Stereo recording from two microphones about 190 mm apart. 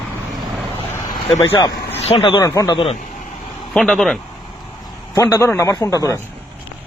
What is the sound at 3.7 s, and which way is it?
Speech, 5° left (ahead or behind).